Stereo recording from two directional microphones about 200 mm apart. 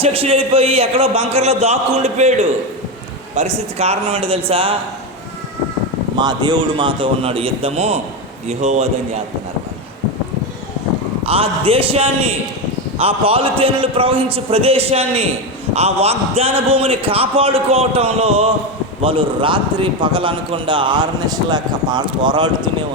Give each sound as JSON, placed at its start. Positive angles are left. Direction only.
{"t": 0.0, "sound": "a man's voice", "side_deg": -30}
{"t": 6.1, "sound": "a man's voice", "side_deg": -20}
{"t": 11.3, "sound": "a man's voice", "side_deg": -30}